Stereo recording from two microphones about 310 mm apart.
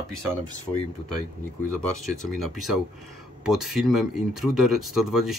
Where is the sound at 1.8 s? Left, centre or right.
Centre.